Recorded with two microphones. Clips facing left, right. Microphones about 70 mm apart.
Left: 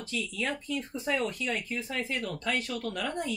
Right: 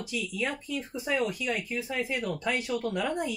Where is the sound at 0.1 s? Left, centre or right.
Centre.